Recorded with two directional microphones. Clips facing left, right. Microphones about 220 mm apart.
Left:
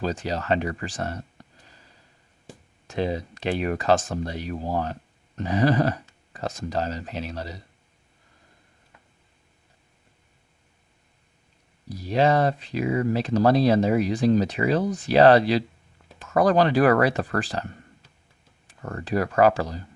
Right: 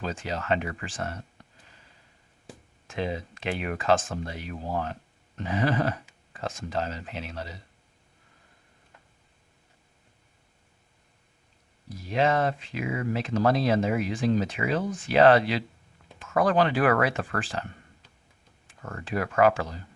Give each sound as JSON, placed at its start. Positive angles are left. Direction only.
{"t": 0.0, "sound": "speech", "side_deg": 40}
{"t": 2.8, "sound": "speech", "side_deg": 40}
{"t": 11.9, "sound": "speech", "side_deg": 35}
{"t": 18.7, "sound": "speech", "side_deg": 35}